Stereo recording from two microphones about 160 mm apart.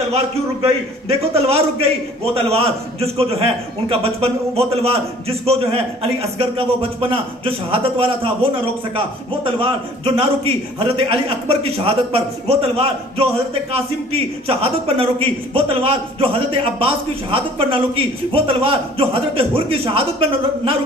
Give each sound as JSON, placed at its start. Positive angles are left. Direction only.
{"t": 0.1, "sound": "a man's voice", "side_deg": -40}